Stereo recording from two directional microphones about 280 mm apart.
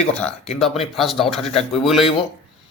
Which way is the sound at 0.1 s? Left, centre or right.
Centre.